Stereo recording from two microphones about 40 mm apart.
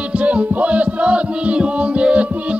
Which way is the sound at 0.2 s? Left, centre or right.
Right.